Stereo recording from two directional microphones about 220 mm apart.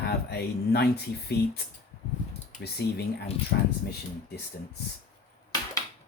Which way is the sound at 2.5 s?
50° left (ahead or behind).